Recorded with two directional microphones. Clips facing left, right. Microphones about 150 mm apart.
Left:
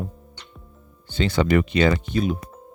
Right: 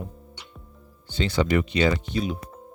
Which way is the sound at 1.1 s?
55° left (ahead or behind).